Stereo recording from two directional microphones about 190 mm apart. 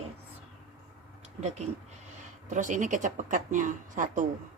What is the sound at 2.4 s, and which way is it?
Speech, 40° right (ahead or behind).